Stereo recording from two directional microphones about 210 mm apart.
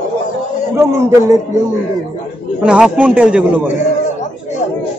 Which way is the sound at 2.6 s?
5° right (ahead or behind).